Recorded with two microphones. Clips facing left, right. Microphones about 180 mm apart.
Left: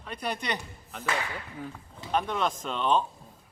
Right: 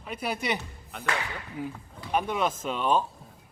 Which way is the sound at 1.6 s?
10° right (ahead or behind).